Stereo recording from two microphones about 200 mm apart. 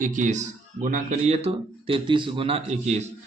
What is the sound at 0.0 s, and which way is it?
Speech, 40° right (ahead or behind).